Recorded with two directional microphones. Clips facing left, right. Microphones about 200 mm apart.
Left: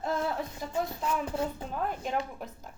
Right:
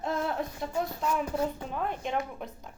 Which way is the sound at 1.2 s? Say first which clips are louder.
Right 2 dB; 25° left (ahead or behind).